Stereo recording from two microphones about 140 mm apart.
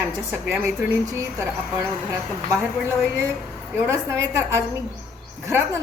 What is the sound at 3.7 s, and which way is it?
A woman's voice, 15° right (ahead or behind).